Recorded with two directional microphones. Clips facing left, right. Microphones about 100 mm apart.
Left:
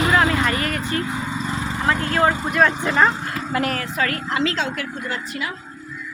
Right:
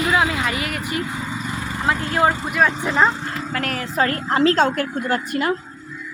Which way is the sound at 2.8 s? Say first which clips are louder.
Even; 15° right (ahead or behind).